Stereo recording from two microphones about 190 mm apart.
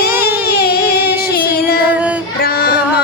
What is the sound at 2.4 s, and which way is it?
Music, 55° left (ahead or behind).